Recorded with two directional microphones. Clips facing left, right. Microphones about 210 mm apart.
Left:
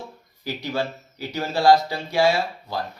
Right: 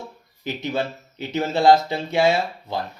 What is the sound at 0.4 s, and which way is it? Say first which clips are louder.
Speech: right 1 dB; 20° right (ahead or behind).